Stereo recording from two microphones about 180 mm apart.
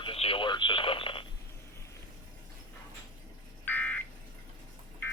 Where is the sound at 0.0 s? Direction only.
30° left (ahead or behind).